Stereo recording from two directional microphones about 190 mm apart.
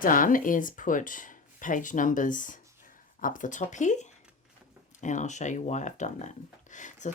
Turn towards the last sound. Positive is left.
turn(degrees=40)  # may be behind; listen again after turning